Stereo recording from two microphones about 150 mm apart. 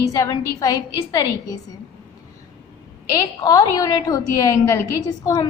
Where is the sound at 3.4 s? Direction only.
25° left (ahead or behind).